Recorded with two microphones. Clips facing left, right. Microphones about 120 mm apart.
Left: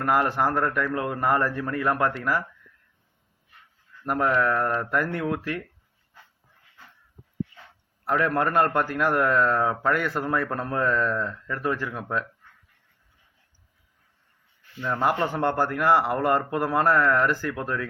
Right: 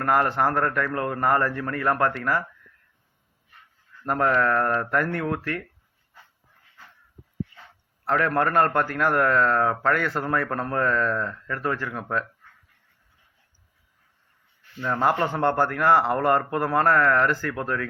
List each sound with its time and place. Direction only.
0.0 s a man's voice: 15° left (ahead or behind)
4.0 s a man's voice: 10° left (ahead or behind)
8.0 s a man's voice: 15° left (ahead or behind)
14.8 s a man's voice: 15° right (ahead or behind)
15.4 s a man's voice: 10° left (ahead or behind)